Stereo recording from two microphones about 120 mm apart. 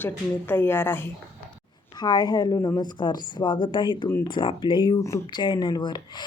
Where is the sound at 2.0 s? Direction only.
35° left (ahead or behind).